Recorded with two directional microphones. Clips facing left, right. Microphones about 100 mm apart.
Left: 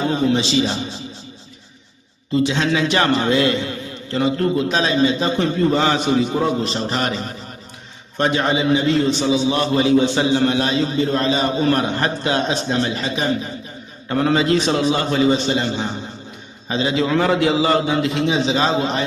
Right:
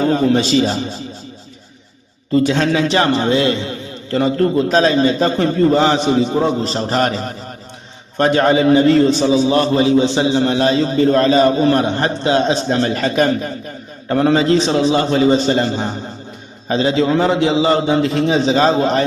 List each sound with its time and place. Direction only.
0.0 s a man's voice: 40° right (ahead or behind)
2.3 s a man's voice: 45° right (ahead or behind); by 12.5 s 30° right (ahead or behind)
12.6 s a man's voice: 40° right (ahead or behind)
14.1 s a man's voice: 35° right (ahead or behind)